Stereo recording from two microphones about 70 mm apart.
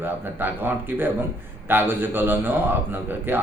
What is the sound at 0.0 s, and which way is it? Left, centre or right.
A man's voice, right.